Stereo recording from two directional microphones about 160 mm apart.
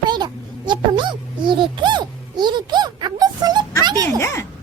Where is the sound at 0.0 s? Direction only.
25° right (ahead or behind).